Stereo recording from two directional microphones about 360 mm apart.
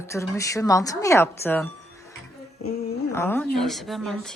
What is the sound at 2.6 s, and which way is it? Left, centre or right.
Speech, centre.